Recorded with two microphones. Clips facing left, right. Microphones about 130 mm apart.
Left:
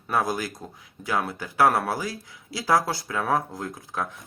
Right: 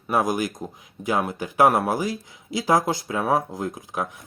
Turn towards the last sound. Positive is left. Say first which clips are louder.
# right 3 dB
turn(degrees=-15)  # may be behind; listen again after turning